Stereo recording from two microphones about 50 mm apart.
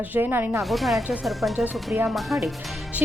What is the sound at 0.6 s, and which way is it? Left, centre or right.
Speech, centre.